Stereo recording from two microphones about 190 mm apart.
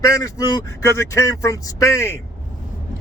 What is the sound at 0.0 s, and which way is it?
Speech, 15° left (ahead or behind).